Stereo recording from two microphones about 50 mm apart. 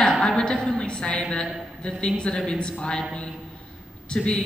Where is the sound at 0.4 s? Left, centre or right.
Centre.